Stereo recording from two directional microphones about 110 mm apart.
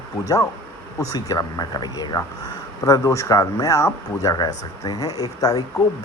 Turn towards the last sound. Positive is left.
turn(degrees=35)  # may be behind; listen again after turning